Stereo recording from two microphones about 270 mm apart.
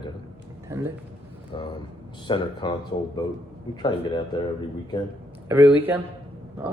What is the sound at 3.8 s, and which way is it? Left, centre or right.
Speech, centre.